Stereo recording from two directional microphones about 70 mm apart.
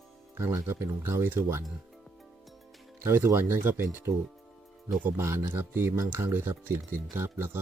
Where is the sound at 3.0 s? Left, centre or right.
Right.